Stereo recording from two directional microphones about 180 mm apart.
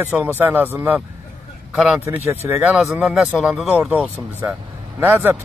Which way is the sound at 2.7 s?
Centre (ahead or behind).